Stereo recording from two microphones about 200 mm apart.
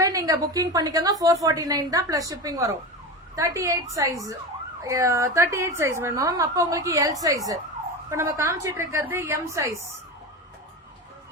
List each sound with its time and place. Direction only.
0.0 s a woman's voice: 15° right (ahead or behind)